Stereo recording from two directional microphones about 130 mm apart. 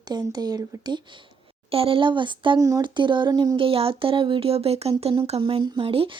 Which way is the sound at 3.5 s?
45° right (ahead or behind).